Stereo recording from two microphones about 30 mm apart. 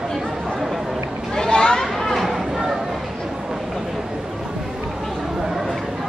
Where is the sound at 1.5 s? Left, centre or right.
Left.